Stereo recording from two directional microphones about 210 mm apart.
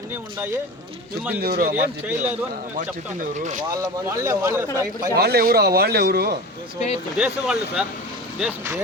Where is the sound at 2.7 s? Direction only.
35° right (ahead or behind).